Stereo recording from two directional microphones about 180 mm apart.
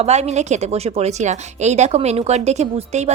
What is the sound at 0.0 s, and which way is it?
Speech, 40° right (ahead or behind).